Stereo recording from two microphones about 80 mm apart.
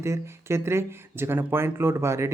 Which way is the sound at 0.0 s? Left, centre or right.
Right.